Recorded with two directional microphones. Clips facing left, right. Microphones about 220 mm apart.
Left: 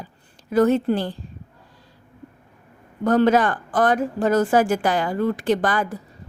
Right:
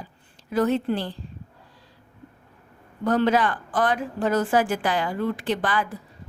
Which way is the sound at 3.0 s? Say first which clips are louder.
Left 4 dB; 45° left (ahead or behind).